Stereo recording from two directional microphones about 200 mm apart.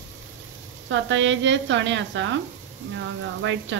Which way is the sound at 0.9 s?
70° right (ahead or behind).